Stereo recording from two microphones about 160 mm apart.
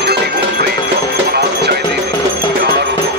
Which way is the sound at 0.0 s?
90° right.